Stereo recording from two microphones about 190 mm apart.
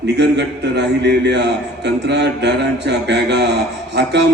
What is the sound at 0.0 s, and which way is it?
A man's voice, 65° right (ahead or behind).